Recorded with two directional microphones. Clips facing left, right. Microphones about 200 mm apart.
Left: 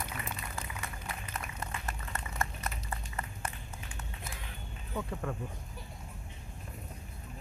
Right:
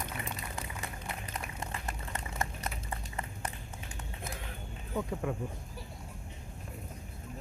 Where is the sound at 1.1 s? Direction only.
25° right (ahead or behind).